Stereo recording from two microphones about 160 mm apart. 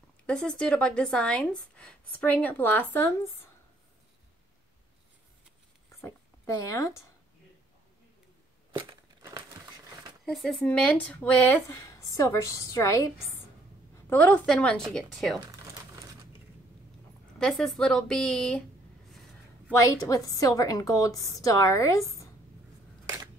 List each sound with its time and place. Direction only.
0.3 s speech: 5° left (ahead or behind)
5.9 s a sound: 20° left (ahead or behind)
10.2 s a woman's voice: centre (ahead or behind)
15.6 s crumpling: 20° right (ahead or behind)
17.4 s a woman's voice: centre (ahead or behind)
19.7 s a woman's voice: 20° left (ahead or behind)